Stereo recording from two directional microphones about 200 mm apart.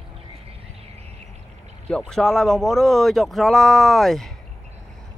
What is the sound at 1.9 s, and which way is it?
Speech, 5° left (ahead or behind).